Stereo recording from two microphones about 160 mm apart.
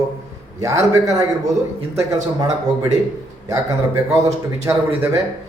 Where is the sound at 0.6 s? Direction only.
20° right (ahead or behind).